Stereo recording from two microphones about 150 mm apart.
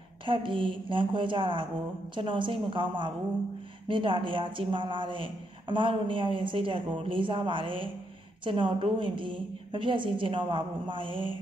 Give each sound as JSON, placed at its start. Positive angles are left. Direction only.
{"t": 0.2, "sound": "speech", "side_deg": -35}